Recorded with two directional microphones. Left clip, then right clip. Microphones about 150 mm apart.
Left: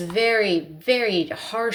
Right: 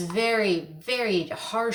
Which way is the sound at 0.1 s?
30° left (ahead or behind).